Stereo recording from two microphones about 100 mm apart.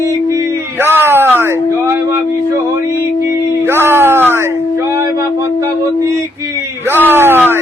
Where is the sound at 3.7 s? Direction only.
25° right (ahead or behind).